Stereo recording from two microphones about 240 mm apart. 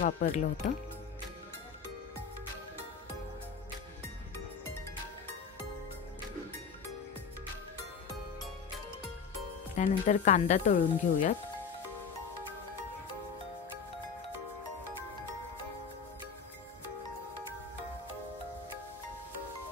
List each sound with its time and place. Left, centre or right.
0.0 s speech: left
9.8 s speech: left